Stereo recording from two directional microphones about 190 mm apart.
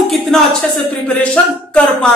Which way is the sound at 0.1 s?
Centre (ahead or behind).